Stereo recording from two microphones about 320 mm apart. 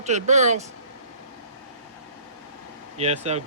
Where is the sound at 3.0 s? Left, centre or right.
Centre.